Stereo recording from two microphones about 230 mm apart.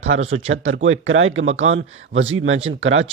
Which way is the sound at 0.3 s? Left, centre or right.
Right.